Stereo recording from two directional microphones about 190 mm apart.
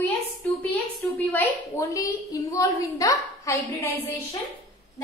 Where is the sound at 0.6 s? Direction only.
10° left (ahead or behind).